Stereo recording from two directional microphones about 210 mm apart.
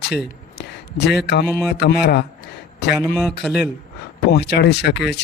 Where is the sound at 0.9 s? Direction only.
40° left (ahead or behind).